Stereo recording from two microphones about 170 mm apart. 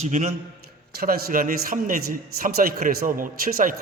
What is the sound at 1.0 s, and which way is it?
A man's voice, 60° right (ahead or behind).